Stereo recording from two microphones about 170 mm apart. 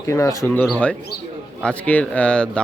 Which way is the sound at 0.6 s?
5° left (ahead or behind).